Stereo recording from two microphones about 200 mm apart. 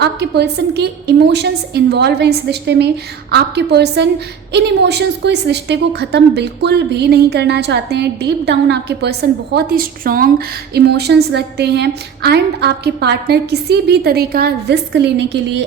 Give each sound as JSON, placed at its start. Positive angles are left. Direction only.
{"t": 0.0, "sound": "a woman's voice", "side_deg": -55}